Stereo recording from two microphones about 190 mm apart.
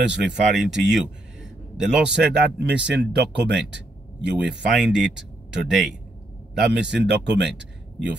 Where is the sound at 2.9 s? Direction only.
65° right (ahead or behind).